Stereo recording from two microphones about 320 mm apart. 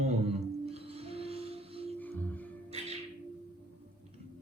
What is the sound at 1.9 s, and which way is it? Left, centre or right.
Music, centre.